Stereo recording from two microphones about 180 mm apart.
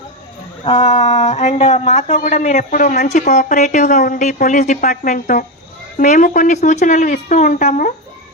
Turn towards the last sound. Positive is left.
turn(degrees=45)  # may be behind; listen again after turning